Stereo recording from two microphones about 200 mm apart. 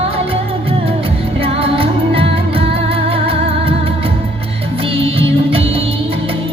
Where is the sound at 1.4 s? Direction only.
30° right (ahead or behind).